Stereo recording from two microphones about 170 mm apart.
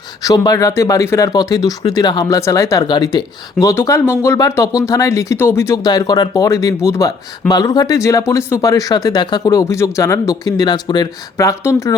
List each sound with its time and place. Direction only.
0.2 s speech: 20° left (ahead or behind)